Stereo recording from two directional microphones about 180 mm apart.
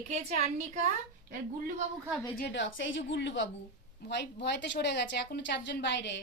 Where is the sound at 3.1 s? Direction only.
80° left.